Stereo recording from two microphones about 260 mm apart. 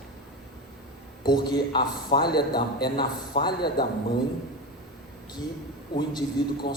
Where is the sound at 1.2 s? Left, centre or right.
Centre.